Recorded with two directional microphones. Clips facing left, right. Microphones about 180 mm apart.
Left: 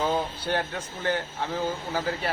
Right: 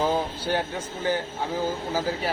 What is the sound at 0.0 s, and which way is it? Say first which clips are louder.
Speech: right 2 dB; 10° right (ahead or behind).